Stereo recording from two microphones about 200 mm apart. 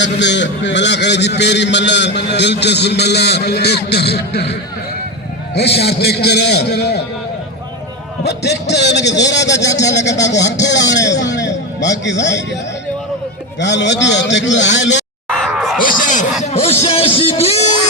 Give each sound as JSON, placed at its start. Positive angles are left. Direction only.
{"t": 0.0, "sound": "a man's voice", "side_deg": 60}
{"t": 5.5, "sound": "a man's voice", "side_deg": 55}
{"t": 8.2, "sound": "a man's voice", "side_deg": 55}
{"t": 13.6, "sound": "a man's voice", "side_deg": 60}
{"t": 15.3, "sound": "a sound", "side_deg": 0}
{"t": 15.8, "sound": "music", "side_deg": 40}
{"t": 16.4, "sound": "music", "side_deg": 30}